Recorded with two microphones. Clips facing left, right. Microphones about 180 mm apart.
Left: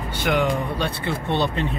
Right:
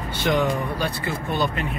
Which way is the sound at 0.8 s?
25° left (ahead or behind).